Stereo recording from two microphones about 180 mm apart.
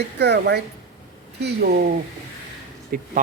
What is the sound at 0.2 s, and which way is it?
Speech, 70° right (ahead or behind).